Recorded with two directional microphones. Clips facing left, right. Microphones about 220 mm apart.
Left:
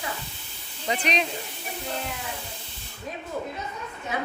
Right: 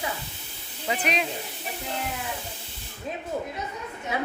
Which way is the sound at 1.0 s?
5° right (ahead or behind).